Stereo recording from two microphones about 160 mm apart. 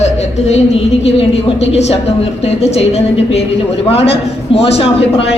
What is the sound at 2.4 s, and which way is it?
A man's voice, 40° left (ahead or behind).